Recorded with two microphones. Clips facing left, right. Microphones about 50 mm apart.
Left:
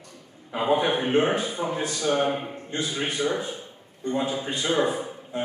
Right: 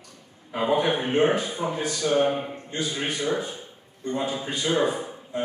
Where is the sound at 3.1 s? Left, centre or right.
Centre.